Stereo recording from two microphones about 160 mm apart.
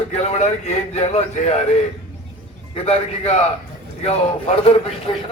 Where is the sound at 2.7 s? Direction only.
40° left (ahead or behind).